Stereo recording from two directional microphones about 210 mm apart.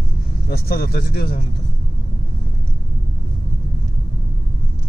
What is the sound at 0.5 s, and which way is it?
Speech, 45° left (ahead or behind).